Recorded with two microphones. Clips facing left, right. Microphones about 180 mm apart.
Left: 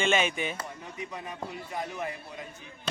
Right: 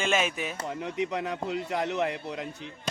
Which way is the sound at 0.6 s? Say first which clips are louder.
Right 9 dB; 75° right (ahead or behind).